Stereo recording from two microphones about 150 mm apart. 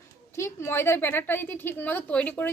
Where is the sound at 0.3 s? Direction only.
15° left (ahead or behind).